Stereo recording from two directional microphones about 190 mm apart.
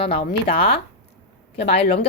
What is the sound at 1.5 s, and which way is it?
Speech, 65° left (ahead or behind).